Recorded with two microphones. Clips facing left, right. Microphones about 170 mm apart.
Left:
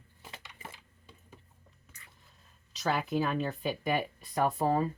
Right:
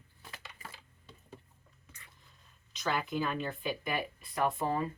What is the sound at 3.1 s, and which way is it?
Speech, 40° left (ahead or behind).